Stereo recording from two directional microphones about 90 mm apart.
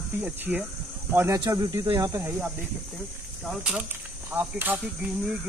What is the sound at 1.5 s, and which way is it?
Speech, 40° right (ahead or behind).